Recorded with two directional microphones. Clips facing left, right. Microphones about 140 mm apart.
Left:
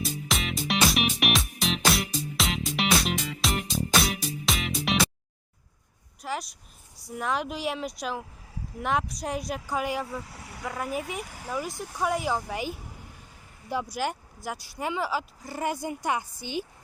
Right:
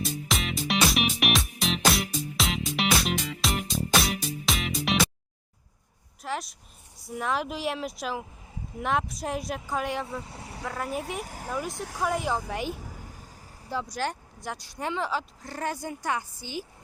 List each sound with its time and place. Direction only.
0.0 s music: centre (ahead or behind)
6.2 s speech: centre (ahead or behind)
10.2 s speech: 25° right (ahead or behind)
10.6 s speech: centre (ahead or behind)
11.2 s speech: 40° right (ahead or behind)
12.0 s speech: centre (ahead or behind)
13.9 s speech: 10° left (ahead or behind)